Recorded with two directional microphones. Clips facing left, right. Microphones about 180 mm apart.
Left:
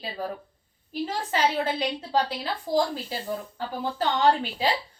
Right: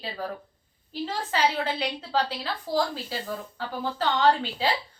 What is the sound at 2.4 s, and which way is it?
Speech, 15° left (ahead or behind).